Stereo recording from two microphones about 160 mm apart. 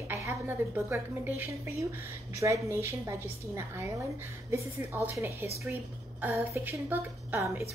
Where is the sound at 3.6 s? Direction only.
15° right (ahead or behind).